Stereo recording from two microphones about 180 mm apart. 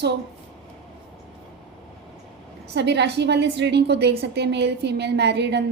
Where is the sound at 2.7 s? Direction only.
70° right (ahead or behind).